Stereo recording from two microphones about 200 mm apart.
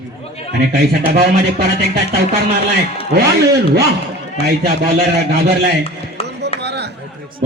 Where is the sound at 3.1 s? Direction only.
50° right (ahead or behind).